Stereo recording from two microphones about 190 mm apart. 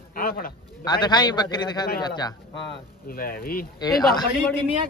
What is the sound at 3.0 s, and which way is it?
Speech, 50° left (ahead or behind).